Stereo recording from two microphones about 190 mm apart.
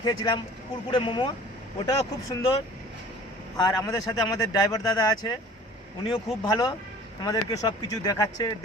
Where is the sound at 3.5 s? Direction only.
20° left (ahead or behind).